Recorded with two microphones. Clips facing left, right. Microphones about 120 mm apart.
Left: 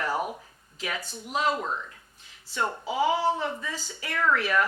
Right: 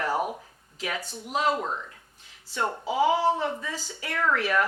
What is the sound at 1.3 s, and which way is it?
Speech, 50° right (ahead or behind).